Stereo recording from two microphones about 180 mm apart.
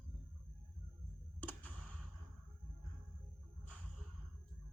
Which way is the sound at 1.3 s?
10° left (ahead or behind).